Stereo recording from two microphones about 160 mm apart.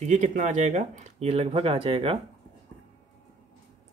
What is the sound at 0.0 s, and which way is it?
Speech, 50° right (ahead or behind).